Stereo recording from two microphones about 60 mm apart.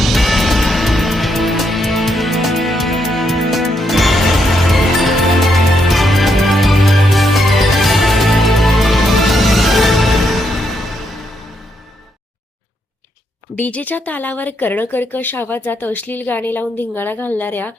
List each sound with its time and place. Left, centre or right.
0.0 s music: centre
13.6 s speech: left